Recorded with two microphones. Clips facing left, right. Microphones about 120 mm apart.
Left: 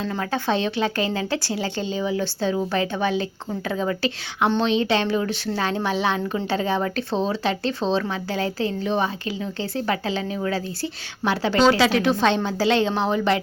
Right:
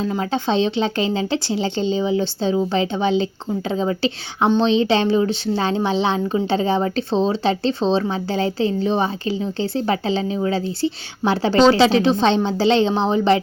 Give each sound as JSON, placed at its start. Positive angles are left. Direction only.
{"t": 0.0, "sound": "speech", "side_deg": -15}